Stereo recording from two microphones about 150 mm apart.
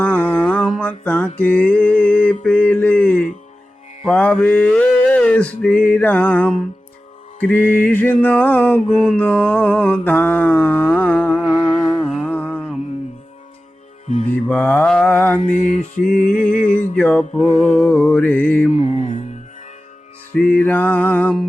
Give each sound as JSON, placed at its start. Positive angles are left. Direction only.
{"t": 0.0, "sound": "music", "side_deg": 10}
{"t": 1.4, "sound": "a sound", "side_deg": 10}
{"t": 2.4, "sound": "mantra", "side_deg": 5}
{"t": 4.1, "sound": "male singing", "side_deg": 10}
{"t": 7.4, "sound": "mantra", "side_deg": 10}
{"t": 11.9, "sound": "music", "side_deg": 5}
{"t": 14.3, "sound": "mantra", "side_deg": 10}
{"t": 15.4, "sound": "mantra", "side_deg": 55}
{"t": 16.4, "sound": "mantra", "side_deg": 10}
{"t": 18.7, "sound": "mantra", "side_deg": 55}
{"t": 20.3, "sound": "mantra", "side_deg": 10}